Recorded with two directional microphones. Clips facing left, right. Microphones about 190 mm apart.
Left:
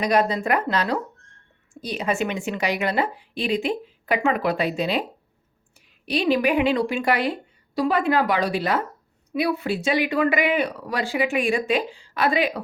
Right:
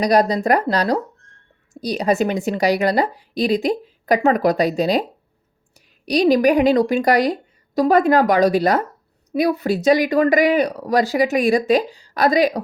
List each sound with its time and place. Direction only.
0.0 s a woman's voice: 35° right (ahead or behind)